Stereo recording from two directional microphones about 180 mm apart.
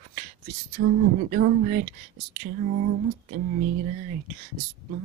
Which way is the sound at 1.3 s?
50° right (ahead or behind).